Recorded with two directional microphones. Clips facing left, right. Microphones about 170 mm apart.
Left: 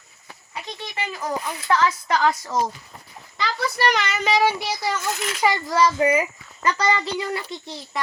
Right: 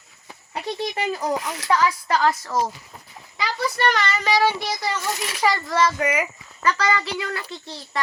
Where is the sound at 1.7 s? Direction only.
10° right (ahead or behind).